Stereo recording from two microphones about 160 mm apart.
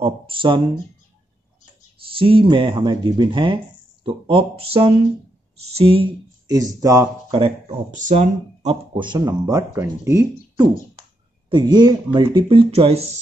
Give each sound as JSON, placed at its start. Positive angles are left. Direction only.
{"t": 0.0, "sound": "speech", "side_deg": -30}
{"t": 2.0, "sound": "speech", "side_deg": -35}
{"t": 6.5, "sound": "speech", "side_deg": -20}
{"t": 7.3, "sound": "speech", "side_deg": -35}
{"t": 7.9, "sound": "speech", "side_deg": -50}
{"t": 8.9, "sound": "speech", "side_deg": -30}
{"t": 11.4, "sound": "speech", "side_deg": -30}